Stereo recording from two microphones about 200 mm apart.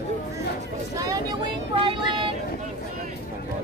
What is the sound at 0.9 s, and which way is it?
Vehicle, 15° right (ahead or behind).